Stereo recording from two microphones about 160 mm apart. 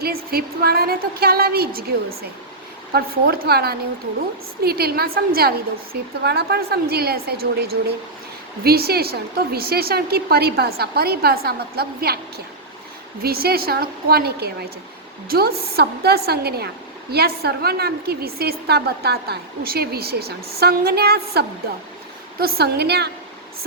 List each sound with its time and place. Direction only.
0.0 s a woman's voice: 75° right (ahead or behind)
2.9 s a woman's voice: 75° right (ahead or behind)
8.6 s a woman's voice: 75° right (ahead or behind)
13.2 s a woman's voice: 75° right (ahead or behind); by 23.1 s 90° right